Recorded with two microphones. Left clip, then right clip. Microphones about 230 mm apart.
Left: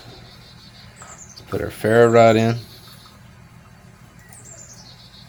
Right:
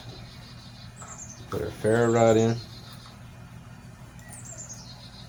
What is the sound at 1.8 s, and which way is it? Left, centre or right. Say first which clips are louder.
Speech: left 9 dB; left.